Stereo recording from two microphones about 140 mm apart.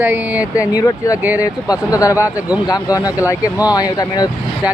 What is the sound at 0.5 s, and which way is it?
Speech, 25° left (ahead or behind).